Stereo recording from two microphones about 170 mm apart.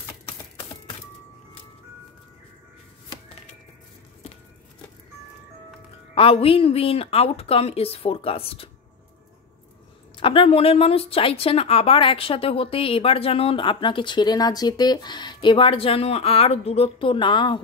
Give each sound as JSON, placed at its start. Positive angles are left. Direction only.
{"t": 6.1, "sound": "a woman's voice", "side_deg": 35}
{"t": 10.1, "sound": "a woman's voice", "side_deg": 30}